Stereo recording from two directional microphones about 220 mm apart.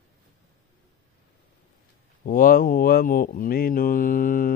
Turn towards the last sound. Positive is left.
turn(degrees=40)  # may be behind; listen again after turning